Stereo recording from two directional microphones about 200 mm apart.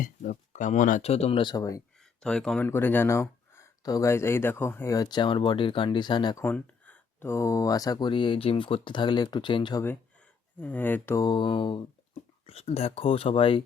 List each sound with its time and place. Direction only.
0.0 s speech: 40° left (ahead or behind); by 1.8 s 15° left (ahead or behind)
2.0 s speech: 5° left (ahead or behind); by 6.4 s 20° left (ahead or behind)
6.4 s speech: 10° left (ahead or behind); by 9.8 s 25° left (ahead or behind)
10.6 s speech: 10° left (ahead or behind); by 13.7 s 25° left (ahead or behind)